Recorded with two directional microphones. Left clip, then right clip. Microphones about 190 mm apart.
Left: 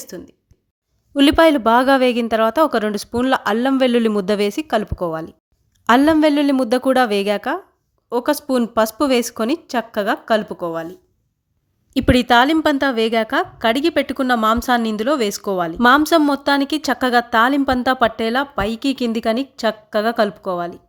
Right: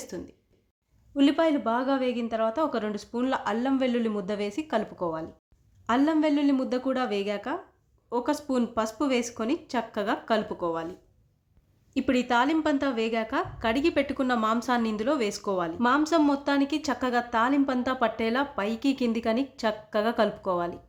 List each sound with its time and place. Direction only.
0.0 s speech: 25° left (ahead or behind)
1.1 s a woman's voice: 45° left (ahead or behind)
11.9 s a woman's voice: 40° left (ahead or behind)